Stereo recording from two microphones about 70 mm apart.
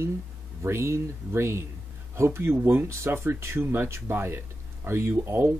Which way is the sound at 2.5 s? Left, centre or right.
Right.